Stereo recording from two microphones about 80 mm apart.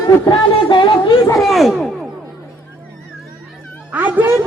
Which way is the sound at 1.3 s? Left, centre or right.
Centre.